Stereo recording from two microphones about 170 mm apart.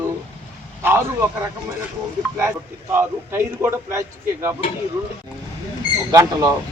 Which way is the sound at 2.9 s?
15° right (ahead or behind).